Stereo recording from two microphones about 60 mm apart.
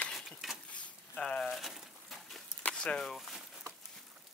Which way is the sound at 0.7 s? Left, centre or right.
Centre.